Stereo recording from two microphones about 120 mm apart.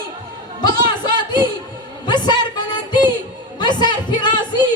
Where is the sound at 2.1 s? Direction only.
40° left (ahead or behind).